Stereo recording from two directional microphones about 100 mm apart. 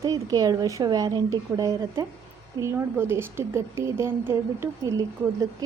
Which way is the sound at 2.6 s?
25° right (ahead or behind).